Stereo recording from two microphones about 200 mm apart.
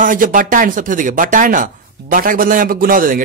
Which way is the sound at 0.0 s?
40° right (ahead or behind).